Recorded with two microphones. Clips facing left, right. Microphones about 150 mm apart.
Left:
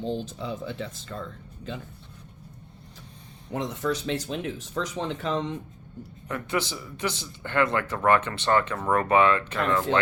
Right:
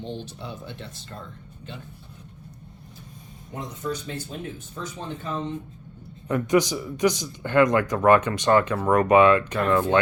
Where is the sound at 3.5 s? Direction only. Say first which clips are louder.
Left 3 dB; 90° left.